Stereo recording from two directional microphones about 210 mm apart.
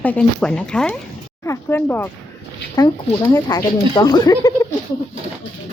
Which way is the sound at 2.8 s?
20° left (ahead or behind).